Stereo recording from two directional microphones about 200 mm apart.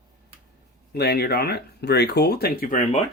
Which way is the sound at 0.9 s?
55° left (ahead or behind).